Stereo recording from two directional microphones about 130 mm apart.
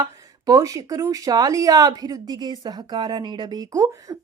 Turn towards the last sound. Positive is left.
turn(degrees=-25)  # may be behind; listen again after turning